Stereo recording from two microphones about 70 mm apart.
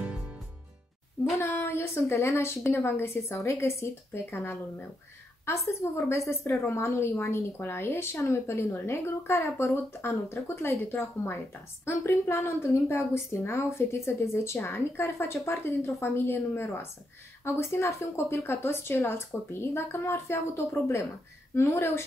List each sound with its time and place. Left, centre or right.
1.4 s a woman's voice: left